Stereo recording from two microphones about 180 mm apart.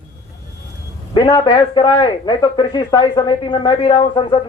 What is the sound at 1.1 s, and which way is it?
A man's voice, 25° left (ahead or behind).